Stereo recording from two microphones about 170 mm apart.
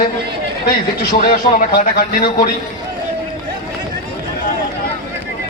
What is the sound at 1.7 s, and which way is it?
Speech, 60° left (ahead or behind).